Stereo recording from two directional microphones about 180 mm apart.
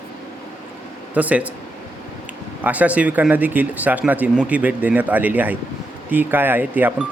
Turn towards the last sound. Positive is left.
turn(degrees=-10)  # may be behind; listen again after turning